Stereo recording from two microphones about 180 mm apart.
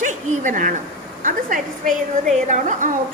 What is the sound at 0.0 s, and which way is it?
A woman's voice, 45° right (ahead or behind).